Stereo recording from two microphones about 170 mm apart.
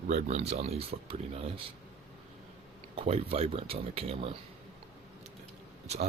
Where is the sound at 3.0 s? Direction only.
35° right (ahead or behind).